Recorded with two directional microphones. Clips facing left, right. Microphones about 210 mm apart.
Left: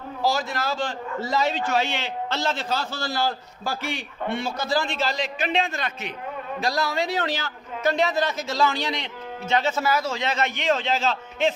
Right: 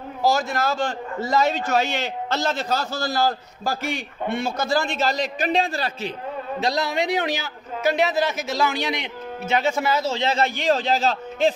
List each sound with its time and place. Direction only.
0.2 s a man's voice: 45° right (ahead or behind)
6.6 s a man's voice: 20° right (ahead or behind); by 8.4 s 5° right (ahead or behind)
8.4 s a man's voice: 15° right (ahead or behind); by 11.5 s 35° right (ahead or behind)